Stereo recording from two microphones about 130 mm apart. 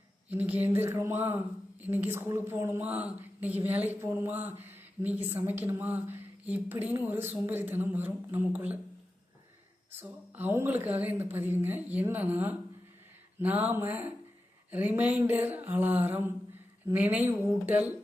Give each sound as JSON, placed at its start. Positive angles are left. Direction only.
{"t": 0.3, "sound": "speech", "side_deg": -15}
{"t": 10.0, "sound": "speech", "side_deg": -15}